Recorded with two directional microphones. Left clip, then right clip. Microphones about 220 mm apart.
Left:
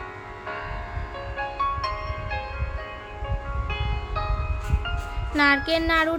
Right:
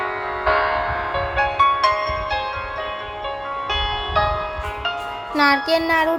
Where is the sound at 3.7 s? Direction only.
45° right (ahead or behind).